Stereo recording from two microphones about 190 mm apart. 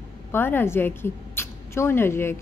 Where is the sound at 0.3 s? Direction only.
10° left (ahead or behind).